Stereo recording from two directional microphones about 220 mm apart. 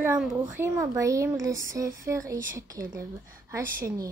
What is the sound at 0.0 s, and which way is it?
A woman's voice, 5° right (ahead or behind).